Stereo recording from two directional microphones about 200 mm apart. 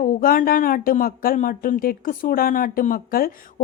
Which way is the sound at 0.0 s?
45° left (ahead or behind).